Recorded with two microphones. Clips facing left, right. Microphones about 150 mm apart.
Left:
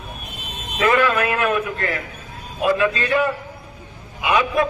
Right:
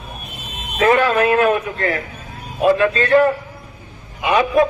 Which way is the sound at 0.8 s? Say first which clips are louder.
Right 3 dB; 35° right (ahead or behind).